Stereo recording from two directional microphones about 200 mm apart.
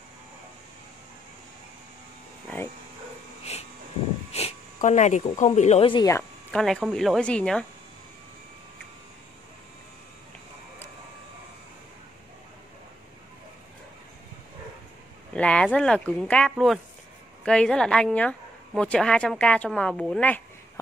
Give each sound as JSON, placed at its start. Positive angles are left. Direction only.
{"t": 4.3, "sound": "speech", "side_deg": 30}
{"t": 6.5, "sound": "speech", "side_deg": 0}
{"t": 15.3, "sound": "speech", "side_deg": 5}